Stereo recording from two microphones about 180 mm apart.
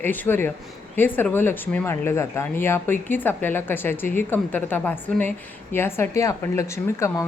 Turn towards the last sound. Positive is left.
turn(degrees=15)  # may be behind; listen again after turning